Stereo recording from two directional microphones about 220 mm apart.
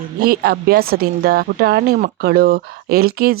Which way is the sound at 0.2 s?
45° right (ahead or behind).